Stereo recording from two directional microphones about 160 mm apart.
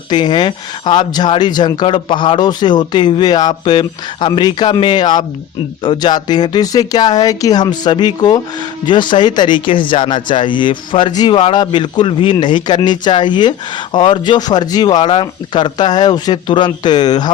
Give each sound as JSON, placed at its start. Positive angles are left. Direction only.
{"t": 0.1, "sound": "speech", "side_deg": 30}